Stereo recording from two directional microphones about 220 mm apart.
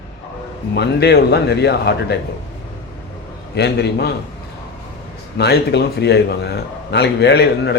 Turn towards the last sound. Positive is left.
turn(degrees=50)  # may be behind; listen again after turning